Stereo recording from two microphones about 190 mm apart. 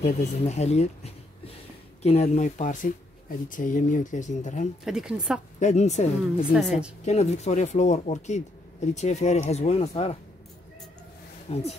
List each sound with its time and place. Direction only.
0.0 s speech: 35° left (ahead or behind)
4.8 s a woman's voice: 5° right (ahead or behind)
5.6 s speech: 35° left (ahead or behind)
6.5 s a woman's voice: 5° right (ahead or behind)
7.1 s speech: 35° left (ahead or behind)
11.5 s speech: 30° left (ahead or behind)